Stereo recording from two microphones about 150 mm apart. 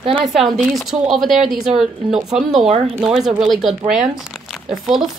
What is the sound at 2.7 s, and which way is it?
Speech, 40° right (ahead or behind).